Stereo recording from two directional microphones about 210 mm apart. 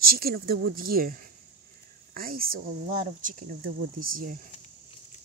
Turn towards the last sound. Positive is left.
turn(degrees=-40)  # may be behind; listen again after turning